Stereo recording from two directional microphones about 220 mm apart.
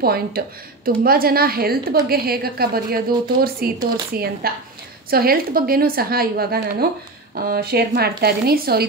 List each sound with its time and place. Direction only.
0.0 s a woman's voice: 45° right (ahead or behind)